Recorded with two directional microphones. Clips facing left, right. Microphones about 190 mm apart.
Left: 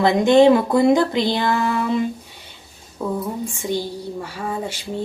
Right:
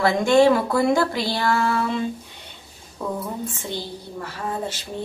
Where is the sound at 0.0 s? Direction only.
20° left (ahead or behind).